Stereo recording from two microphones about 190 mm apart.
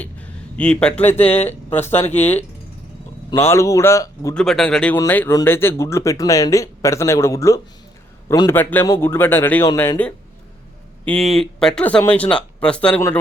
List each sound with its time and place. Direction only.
0.0 s a man's voice: 5° left (ahead or behind)
1.2 s speech: 35° left (ahead or behind)
1.5 s speech: 10° left (ahead or behind)
4.4 s speech: 5° left (ahead or behind)